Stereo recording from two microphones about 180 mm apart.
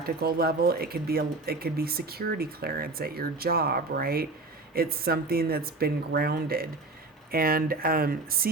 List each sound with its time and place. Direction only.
0.0 s speech: 60° right (ahead or behind)